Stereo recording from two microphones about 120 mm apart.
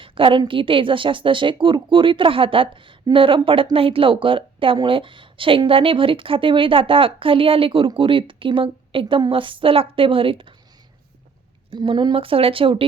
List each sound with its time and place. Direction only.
0.0 s a woman's voice: 45° right (ahead or behind)
11.9 s a woman's voice: 45° right (ahead or behind)